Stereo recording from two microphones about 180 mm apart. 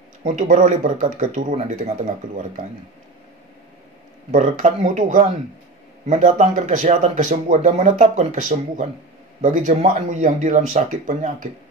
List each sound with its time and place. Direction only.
0.4 s speech: 45° right (ahead or behind)
4.3 s speech: 45° right (ahead or behind)